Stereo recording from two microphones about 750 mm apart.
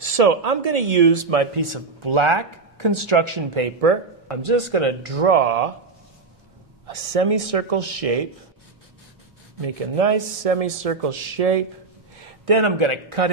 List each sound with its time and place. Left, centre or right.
0.0 s speech: right
6.9 s speech: right
9.6 s speech: right